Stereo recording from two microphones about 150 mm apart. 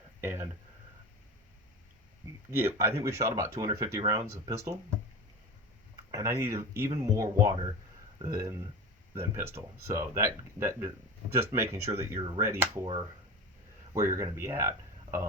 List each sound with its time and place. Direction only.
0.2 s speech: 15° right (ahead or behind)
2.5 s speech: 15° right (ahead or behind)
6.1 s speech: 20° right (ahead or behind)
12.8 s speech: 30° right (ahead or behind)
13.9 s speech: 20° right (ahead or behind)